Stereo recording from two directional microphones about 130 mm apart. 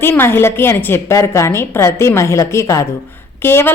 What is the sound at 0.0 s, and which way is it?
A woman's voice, 20° left (ahead or behind).